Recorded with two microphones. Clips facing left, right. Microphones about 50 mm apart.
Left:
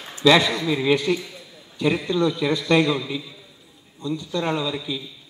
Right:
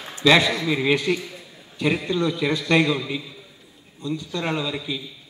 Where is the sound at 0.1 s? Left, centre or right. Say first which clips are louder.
Left 1 dB; right.